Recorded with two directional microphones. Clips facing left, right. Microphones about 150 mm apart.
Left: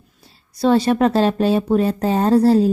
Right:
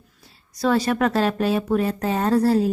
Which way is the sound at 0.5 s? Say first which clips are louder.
Left 5 dB; 30° left (ahead or behind).